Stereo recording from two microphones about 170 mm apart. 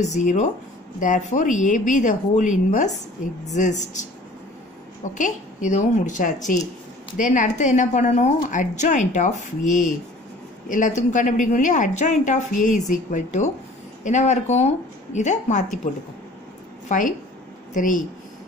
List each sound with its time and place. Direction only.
0.0 s a woman's voice: 45° left (ahead or behind)
5.1 s a woman's voice: 45° left (ahead or behind)
16.9 s a woman's voice: 45° left (ahead or behind)